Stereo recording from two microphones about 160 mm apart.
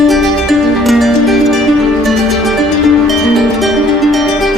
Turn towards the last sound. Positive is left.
turn(degrees=0)  # may be behind; listen again after turning